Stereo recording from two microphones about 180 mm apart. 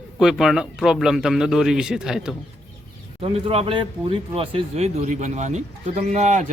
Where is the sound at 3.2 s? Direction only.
30° right (ahead or behind).